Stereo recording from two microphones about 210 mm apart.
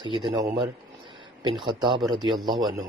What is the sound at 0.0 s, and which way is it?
A man's voice, 20° right (ahead or behind).